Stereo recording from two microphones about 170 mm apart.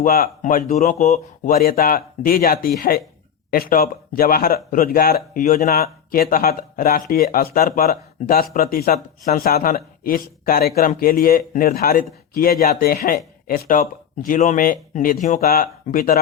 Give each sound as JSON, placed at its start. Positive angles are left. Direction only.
{"t": 0.0, "sound": "speech", "side_deg": 55}
{"t": 0.8, "sound": "speech", "side_deg": 45}
{"t": 1.5, "sound": "speech", "side_deg": 60}